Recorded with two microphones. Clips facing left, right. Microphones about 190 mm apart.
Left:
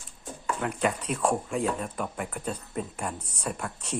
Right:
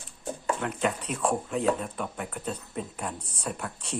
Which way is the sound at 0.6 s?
Centre (ahead or behind).